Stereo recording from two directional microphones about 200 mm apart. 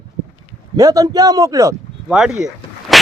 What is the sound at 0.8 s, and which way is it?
Speech, 15° right (ahead or behind).